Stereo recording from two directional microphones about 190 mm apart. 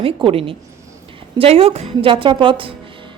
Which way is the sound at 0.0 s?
30° right (ahead or behind).